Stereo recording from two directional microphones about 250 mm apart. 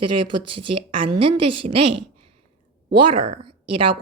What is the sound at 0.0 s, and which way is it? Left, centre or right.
Speech, right.